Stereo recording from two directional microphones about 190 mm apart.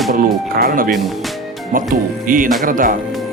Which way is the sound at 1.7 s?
45° right (ahead or behind).